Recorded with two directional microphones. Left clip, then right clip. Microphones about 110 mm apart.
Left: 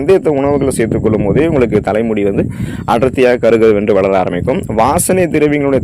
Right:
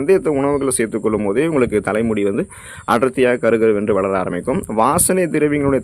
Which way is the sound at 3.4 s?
45° left (ahead or behind).